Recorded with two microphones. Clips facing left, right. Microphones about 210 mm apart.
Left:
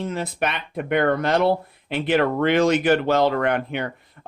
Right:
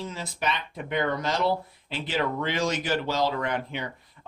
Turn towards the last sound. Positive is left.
turn(degrees=60)  # may be behind; listen again after turning